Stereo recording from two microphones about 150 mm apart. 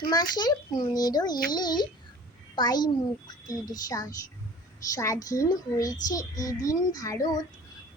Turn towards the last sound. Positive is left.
turn(degrees=20)  # may be behind; listen again after turning